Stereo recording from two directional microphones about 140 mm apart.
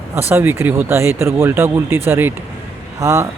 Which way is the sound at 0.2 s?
15° right (ahead or behind).